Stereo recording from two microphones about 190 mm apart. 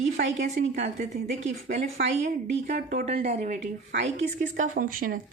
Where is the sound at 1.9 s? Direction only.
45° right (ahead or behind).